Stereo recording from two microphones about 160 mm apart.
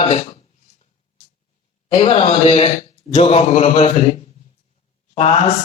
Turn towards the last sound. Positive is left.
turn(degrees=35)  # may be behind; listen again after turning